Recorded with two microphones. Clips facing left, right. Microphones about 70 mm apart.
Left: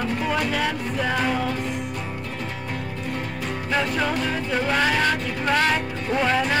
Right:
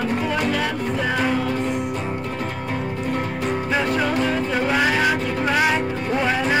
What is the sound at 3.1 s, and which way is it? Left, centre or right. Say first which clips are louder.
Music: right 5 dB; right.